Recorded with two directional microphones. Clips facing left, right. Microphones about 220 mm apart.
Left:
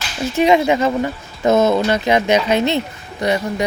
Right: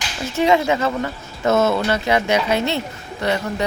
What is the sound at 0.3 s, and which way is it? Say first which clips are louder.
Speech: left 3 dB; 20° left (ahead or behind).